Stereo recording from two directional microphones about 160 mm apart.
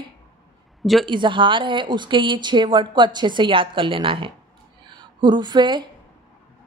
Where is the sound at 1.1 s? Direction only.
30° right (ahead or behind).